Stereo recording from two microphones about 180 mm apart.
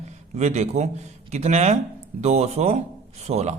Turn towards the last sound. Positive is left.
turn(degrees=-40)  # may be behind; listen again after turning